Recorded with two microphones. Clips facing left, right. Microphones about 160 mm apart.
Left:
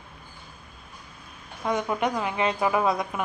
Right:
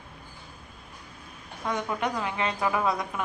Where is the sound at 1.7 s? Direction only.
10° left (ahead or behind).